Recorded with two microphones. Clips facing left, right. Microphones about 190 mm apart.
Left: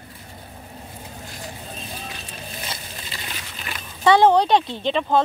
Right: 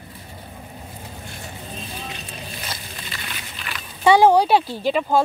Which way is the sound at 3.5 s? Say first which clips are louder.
Even; 40° left (ahead or behind).